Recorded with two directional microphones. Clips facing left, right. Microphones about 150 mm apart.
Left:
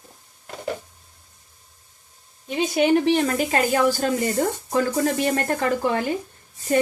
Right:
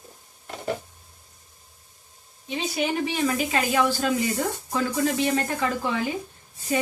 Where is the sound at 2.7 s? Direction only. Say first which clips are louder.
Left 8 dB; 60° left (ahead or behind).